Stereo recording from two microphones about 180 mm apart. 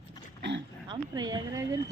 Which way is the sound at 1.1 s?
20° right (ahead or behind).